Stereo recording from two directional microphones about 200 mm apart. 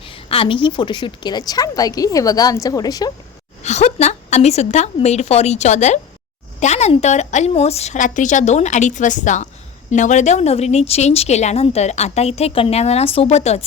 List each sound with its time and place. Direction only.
0.0 s a woman's voice: 25° left (ahead or behind)
3.6 s a woman's voice: 35° left (ahead or behind)